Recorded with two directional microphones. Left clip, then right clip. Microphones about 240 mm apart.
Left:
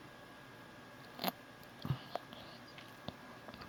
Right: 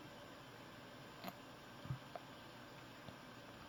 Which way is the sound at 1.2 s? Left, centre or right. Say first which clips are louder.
Left 13 dB; left.